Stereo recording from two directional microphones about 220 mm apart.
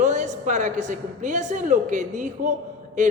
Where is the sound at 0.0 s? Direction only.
35° right (ahead or behind).